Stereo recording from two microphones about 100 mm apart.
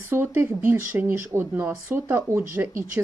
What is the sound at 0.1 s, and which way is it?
Speech, 25° right (ahead or behind).